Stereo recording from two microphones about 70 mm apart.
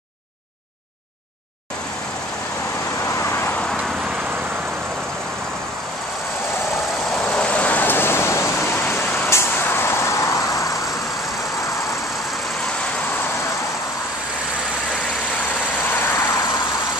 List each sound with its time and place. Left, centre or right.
3.2 s vehicle: left
7.2 s vehicle: centre; by 10.7 s left
15.9 s vehicle: left